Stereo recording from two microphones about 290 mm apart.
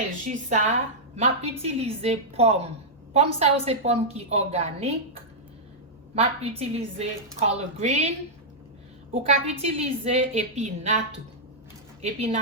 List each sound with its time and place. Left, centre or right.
0.3 s a woman's voice: right
6.1 s a woman's voice: right
9.1 s a woman's voice: right